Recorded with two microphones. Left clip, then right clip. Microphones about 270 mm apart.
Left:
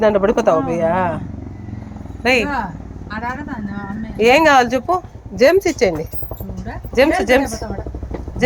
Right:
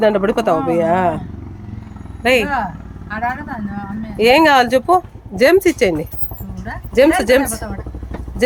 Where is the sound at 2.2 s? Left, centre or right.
Centre.